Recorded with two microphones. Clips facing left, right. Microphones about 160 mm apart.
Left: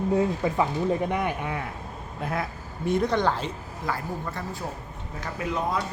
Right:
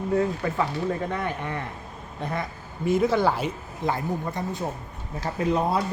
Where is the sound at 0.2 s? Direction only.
10° left (ahead or behind); by 3.5 s 10° right (ahead or behind).